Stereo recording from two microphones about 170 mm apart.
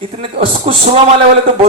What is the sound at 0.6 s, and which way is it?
Speech, 35° right (ahead or behind).